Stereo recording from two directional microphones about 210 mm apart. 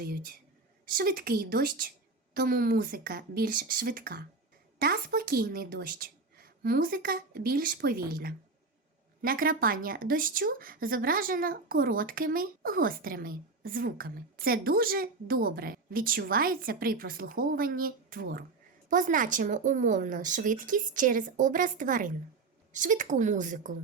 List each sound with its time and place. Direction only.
0.0 s speech: 45° right (ahead or behind)